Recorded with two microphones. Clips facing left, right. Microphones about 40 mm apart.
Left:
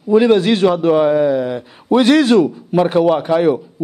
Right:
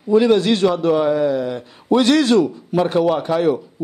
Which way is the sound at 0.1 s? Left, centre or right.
Left.